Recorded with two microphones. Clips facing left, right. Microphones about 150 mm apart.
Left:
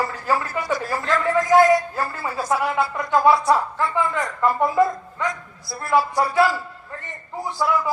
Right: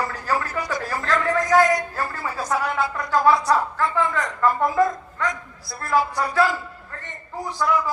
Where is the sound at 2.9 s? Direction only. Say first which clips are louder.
Left 1 dB; 20° left (ahead or behind).